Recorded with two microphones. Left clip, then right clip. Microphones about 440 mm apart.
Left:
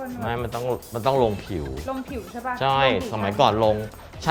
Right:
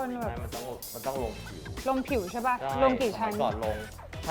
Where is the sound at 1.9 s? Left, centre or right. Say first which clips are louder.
Right 3 dB; right.